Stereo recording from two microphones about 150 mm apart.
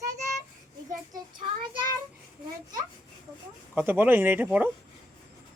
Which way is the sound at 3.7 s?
15° right (ahead or behind).